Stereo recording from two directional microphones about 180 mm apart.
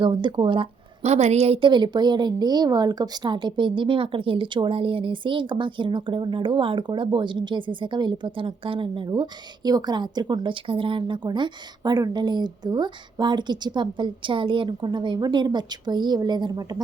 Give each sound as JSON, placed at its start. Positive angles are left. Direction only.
{"t": 0.0, "sound": "a woman's voice", "side_deg": -25}